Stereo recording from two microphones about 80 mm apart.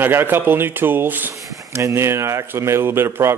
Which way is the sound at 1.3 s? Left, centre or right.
Right.